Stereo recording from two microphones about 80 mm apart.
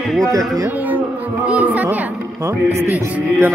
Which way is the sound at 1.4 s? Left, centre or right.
Centre.